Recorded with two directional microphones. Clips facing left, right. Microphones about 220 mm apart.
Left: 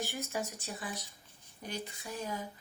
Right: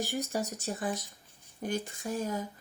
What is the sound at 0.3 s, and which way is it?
A woman's voice, 45° right (ahead or behind).